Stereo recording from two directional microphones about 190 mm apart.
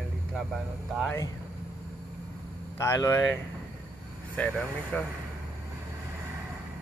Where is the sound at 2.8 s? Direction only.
15° left (ahead or behind).